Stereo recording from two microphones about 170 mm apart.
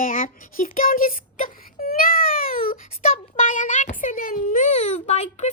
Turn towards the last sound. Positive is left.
turn(degrees=40)  # may be behind; listen again after turning